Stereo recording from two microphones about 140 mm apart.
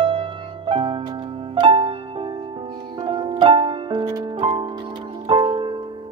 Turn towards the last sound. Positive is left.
turn(degrees=-35)  # may be behind; listen again after turning